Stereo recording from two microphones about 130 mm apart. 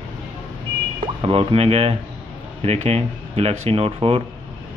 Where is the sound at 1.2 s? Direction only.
45° right (ahead or behind).